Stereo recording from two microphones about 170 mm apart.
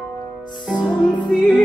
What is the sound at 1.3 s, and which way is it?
Music, centre (ahead or behind).